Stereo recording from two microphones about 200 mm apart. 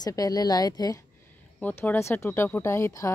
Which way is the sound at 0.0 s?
20° left (ahead or behind).